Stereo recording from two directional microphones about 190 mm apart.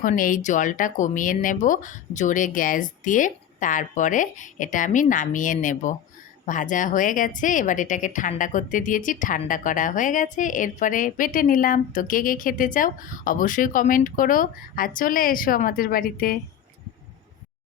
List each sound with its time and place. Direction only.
0.0 s a woman's voice: 45° left (ahead or behind)